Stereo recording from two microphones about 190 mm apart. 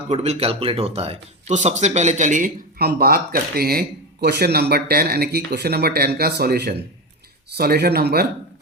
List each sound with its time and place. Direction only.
0.1 s speech: 35° right (ahead or behind); by 8.3 s 55° right (ahead or behind)